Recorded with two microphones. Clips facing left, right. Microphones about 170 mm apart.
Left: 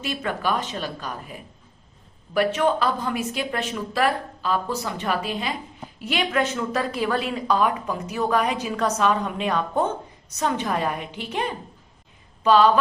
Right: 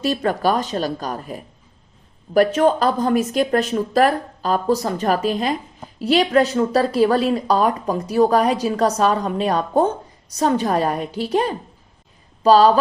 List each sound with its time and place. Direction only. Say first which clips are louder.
0.0 s a woman's voice: right 7 dB; 40° right (ahead or behind)